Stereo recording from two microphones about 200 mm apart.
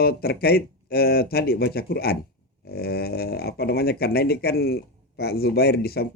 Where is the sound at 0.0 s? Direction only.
50° left (ahead or behind).